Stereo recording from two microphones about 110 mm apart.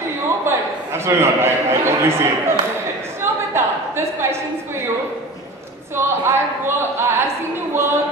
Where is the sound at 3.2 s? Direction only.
20° right (ahead or behind).